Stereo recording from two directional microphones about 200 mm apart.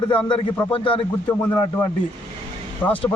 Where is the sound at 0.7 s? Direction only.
25° left (ahead or behind).